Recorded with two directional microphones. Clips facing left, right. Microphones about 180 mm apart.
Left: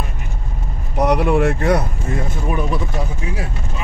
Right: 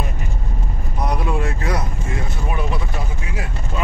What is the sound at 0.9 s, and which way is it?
Vehicle, 70° left (ahead or behind).